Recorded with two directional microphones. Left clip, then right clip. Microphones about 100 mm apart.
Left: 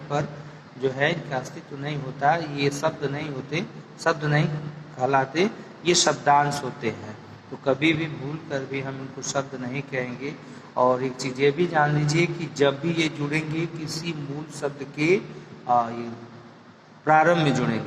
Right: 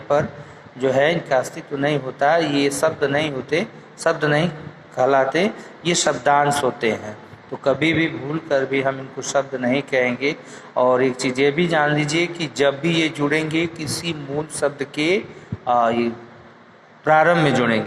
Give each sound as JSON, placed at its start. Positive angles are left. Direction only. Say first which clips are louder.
{"t": 0.8, "sound": "a man's voice", "louder": "right 7 dB", "side_deg": -30}